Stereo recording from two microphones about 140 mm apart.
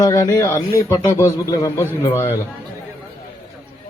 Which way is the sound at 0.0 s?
25° left (ahead or behind).